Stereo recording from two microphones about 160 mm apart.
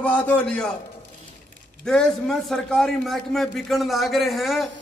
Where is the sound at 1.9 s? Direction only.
5° left (ahead or behind).